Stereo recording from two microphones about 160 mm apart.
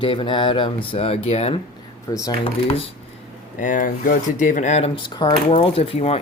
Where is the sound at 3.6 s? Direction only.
55° left (ahead or behind).